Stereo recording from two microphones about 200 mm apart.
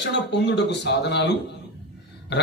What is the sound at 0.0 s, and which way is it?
Speech, 60° left (ahead or behind).